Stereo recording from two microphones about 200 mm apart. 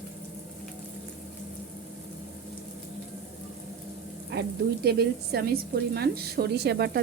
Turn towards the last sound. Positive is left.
turn(degrees=-55)  # may be behind; listen again after turning